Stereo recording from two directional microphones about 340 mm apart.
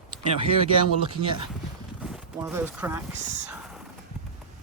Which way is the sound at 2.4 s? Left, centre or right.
Centre.